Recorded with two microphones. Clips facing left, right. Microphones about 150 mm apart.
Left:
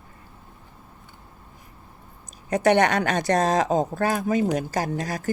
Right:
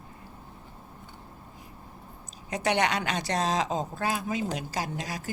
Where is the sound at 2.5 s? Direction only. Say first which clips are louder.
Left 7 dB; 50° left (ahead or behind).